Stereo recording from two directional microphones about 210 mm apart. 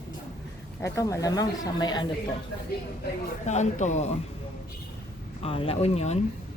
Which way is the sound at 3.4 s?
35° left (ahead or behind).